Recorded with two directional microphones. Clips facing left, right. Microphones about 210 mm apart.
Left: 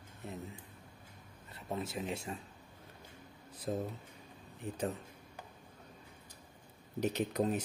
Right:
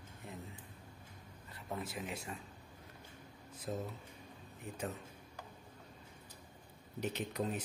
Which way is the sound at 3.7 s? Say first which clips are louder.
Left 4 dB; 40° left (ahead or behind).